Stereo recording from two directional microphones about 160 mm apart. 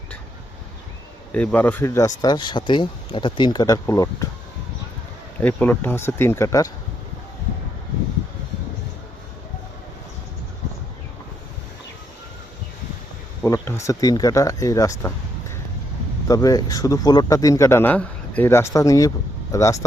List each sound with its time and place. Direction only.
1.3 s speech: 10° left (ahead or behind)
5.4 s speech: 10° left (ahead or behind)
13.4 s speech: 15° left (ahead or behind)
16.3 s speech: 20° left (ahead or behind)